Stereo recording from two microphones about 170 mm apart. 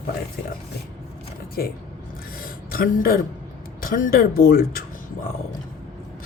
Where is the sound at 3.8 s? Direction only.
55° left (ahead or behind).